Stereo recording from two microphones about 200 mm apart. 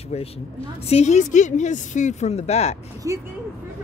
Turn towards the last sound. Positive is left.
turn(degrees=-15)  # may be behind; listen again after turning